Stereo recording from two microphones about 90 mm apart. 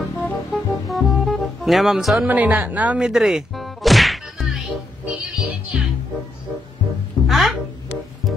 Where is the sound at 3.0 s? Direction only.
5° right (ahead or behind).